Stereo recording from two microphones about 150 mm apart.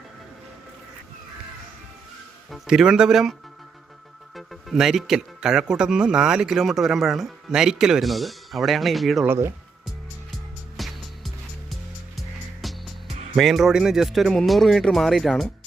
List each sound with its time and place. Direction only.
2.5 s speech: 5° right (ahead or behind)
4.4 s speech: centre (ahead or behind)
9.2 s speech: 15° right (ahead or behind)
10.8 s music: centre (ahead or behind)
12.6 s music: centre (ahead or behind)
13.3 s speech: centre (ahead or behind)